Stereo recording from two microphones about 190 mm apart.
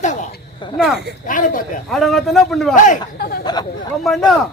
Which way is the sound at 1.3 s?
45° left (ahead or behind).